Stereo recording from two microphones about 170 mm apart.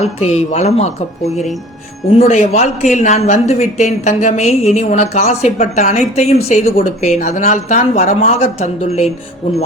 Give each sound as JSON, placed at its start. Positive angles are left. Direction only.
{"t": 0.0, "sound": "speech", "side_deg": 40}